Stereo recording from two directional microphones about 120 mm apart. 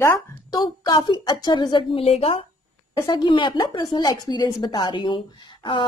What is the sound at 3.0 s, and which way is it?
A woman's voice, 40° left (ahead or behind).